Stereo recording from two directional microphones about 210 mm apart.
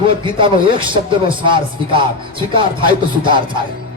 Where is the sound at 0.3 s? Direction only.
25° right (ahead or behind).